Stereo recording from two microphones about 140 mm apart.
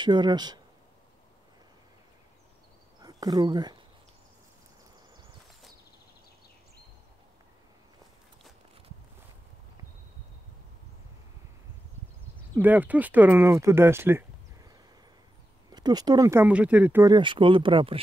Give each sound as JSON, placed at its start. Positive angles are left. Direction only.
{"t": 0.0, "sound": "speech", "side_deg": -30}
{"t": 3.0, "sound": "speech", "side_deg": -25}
{"t": 12.5, "sound": "speech", "side_deg": -10}
{"t": 15.7, "sound": "speech", "side_deg": -30}
{"t": 17.0, "sound": "speech", "side_deg": -35}